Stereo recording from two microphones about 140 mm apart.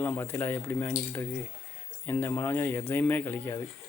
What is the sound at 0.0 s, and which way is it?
Speech, 15° left (ahead or behind).